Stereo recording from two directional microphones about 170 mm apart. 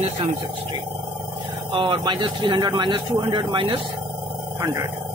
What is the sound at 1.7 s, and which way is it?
Speech, 30° right (ahead or behind).